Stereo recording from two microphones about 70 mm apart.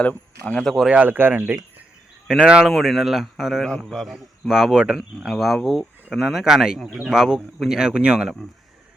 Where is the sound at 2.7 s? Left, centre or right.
Centre.